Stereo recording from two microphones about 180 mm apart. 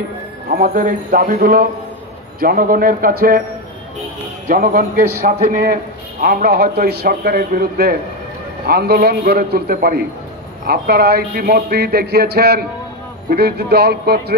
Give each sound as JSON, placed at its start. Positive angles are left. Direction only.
{"t": 0.5, "sound": "a man's voice", "side_deg": -50}
{"t": 4.5, "sound": "a man's voice", "side_deg": -50}